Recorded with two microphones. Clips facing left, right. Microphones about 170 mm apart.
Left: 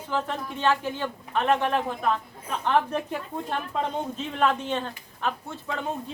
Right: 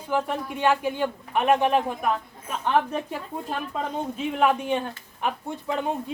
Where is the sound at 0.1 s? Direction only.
15° right (ahead or behind).